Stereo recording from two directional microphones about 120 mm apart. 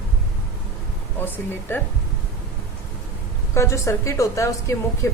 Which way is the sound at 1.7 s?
20° left (ahead or behind).